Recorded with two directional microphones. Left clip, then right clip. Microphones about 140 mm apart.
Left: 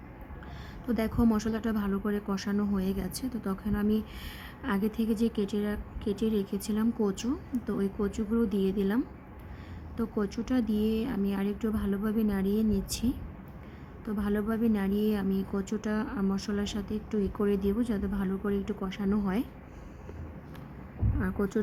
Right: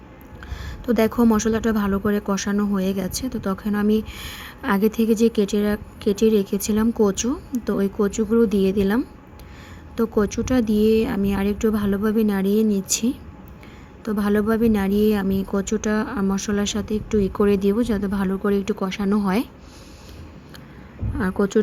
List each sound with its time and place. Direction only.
0.9 s a woman's voice: 30° right (ahead or behind)
10.0 s a woman's voice: 25° right (ahead or behind)
21.2 s a woman's voice: 30° right (ahead or behind)